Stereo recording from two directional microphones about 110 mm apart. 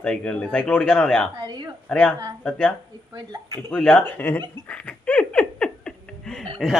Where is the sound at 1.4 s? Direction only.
40° right (ahead or behind).